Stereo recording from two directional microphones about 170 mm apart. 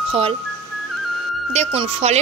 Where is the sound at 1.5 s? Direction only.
40° right (ahead or behind).